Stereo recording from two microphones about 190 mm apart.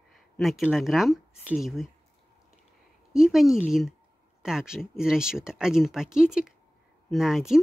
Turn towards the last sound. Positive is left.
turn(degrees=0)  # may be behind; listen again after turning